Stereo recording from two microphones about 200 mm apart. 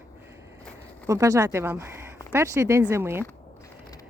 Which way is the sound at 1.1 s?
15° right (ahead or behind).